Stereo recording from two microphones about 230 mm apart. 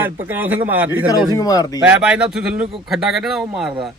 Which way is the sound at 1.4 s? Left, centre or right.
Centre.